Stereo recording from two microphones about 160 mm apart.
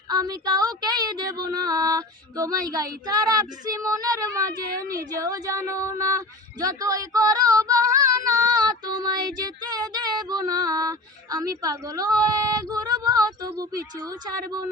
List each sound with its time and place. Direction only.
0.1 s speech: 25° right (ahead or behind)